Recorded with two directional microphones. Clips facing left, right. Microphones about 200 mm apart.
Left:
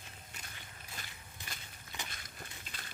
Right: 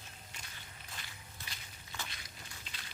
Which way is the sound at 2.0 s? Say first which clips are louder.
Left 2 dB; 50° left (ahead or behind).